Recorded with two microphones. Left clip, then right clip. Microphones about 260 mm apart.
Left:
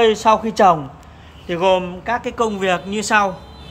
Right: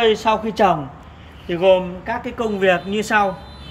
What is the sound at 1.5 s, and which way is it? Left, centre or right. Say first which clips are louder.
A man's voice: right 1 dB; centre.